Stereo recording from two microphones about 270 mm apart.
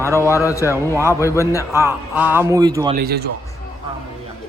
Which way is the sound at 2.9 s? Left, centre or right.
Right.